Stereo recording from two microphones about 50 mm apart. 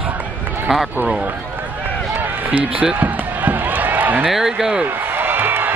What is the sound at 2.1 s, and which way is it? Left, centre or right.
Run, right.